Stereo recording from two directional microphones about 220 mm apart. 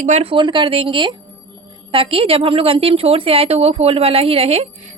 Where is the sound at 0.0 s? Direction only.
30° right (ahead or behind).